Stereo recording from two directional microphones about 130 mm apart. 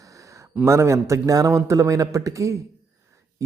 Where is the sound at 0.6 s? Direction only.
20° right (ahead or behind).